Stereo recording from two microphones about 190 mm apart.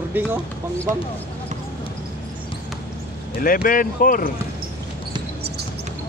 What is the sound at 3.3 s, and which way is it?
Speech, 50° left (ahead or behind).